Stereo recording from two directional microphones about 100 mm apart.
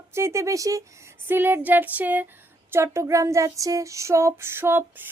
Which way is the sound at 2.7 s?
30° right (ahead or behind).